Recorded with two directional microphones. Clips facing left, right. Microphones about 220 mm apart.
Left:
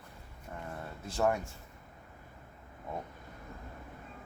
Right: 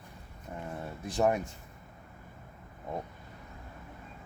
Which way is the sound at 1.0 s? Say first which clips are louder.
Right 3 dB; 15° right (ahead or behind).